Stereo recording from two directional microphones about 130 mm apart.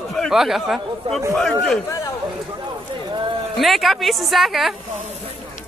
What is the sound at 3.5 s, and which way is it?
A man's voice, centre (ahead or behind).